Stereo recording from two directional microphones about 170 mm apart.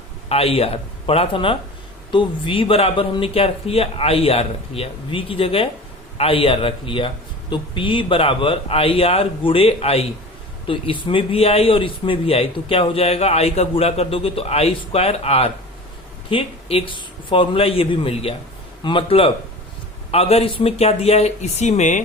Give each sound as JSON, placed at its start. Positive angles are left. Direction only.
{"t": 0.3, "sound": "a man's voice", "side_deg": 35}